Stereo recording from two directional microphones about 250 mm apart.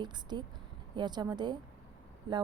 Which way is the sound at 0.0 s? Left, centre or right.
Centre.